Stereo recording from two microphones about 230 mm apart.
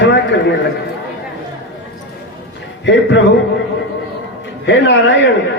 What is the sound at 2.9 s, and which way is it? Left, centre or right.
Speech, left.